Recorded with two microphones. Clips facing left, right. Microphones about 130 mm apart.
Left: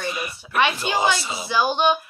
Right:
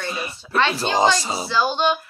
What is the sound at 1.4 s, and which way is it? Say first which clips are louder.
Speech: left 1 dB; 15° left (ahead or behind).